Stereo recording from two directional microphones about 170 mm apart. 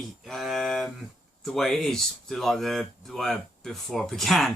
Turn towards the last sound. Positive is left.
turn(degrees=0)  # may be behind; listen again after turning